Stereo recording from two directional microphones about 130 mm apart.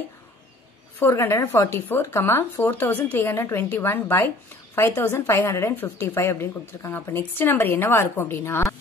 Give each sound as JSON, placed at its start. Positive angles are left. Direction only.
{"t": 0.9, "sound": "speech", "side_deg": 20}